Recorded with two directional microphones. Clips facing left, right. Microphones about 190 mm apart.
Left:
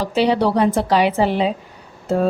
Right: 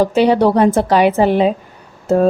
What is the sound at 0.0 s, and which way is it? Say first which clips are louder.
Speech: right 5 dB; 50° right (ahead or behind).